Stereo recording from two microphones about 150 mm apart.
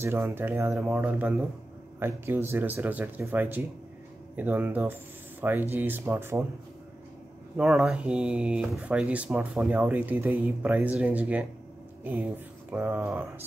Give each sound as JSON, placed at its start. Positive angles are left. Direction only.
{"t": 0.0, "sound": "speech", "side_deg": -15}
{"t": 7.5, "sound": "speech", "side_deg": -5}